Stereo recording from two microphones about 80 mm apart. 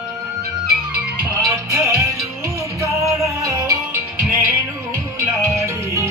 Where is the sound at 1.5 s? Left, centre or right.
Right.